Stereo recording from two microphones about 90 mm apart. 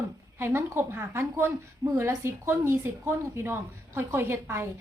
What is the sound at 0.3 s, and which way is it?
Speech, 25° right (ahead or behind).